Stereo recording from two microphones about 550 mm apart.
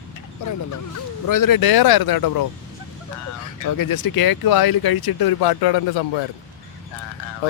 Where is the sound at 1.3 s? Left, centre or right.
Left.